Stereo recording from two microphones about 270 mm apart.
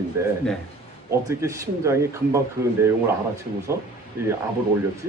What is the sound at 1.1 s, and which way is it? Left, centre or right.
Speech, centre.